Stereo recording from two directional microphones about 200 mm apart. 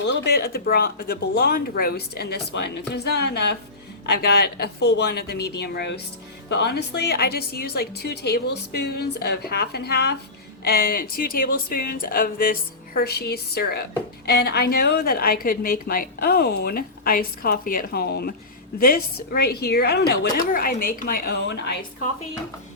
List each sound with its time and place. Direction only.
0.0 s a woman's voice: 55° left (ahead or behind)